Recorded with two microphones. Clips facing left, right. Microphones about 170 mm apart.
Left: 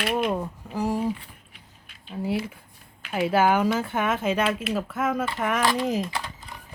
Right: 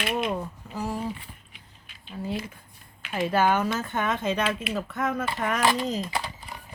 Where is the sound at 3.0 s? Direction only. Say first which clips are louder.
Left 2 dB; 10° left (ahead or behind).